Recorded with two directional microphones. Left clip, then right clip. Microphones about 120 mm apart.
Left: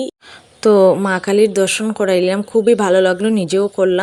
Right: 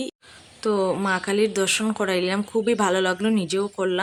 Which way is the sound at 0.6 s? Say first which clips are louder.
Left 12 dB; 60° left (ahead or behind).